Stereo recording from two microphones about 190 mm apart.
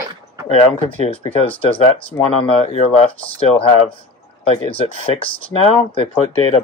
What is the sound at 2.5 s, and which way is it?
Speech, 30° left (ahead or behind).